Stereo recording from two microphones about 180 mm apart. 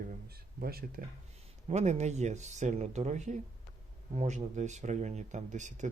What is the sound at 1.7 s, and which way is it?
Speech, 40° right (ahead or behind).